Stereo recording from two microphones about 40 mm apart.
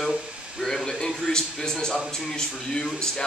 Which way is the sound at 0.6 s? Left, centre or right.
Centre.